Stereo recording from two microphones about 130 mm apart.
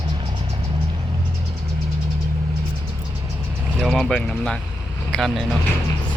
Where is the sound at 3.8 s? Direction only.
Centre (ahead or behind).